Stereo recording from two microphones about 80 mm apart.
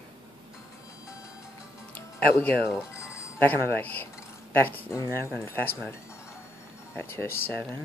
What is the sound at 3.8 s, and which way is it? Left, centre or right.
Speech, left.